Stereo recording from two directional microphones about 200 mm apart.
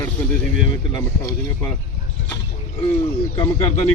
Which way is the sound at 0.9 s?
15° left (ahead or behind).